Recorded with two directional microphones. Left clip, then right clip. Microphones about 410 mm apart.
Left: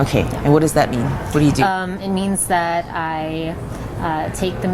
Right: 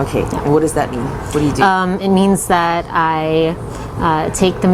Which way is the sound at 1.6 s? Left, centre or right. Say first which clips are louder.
Right 6 dB; right.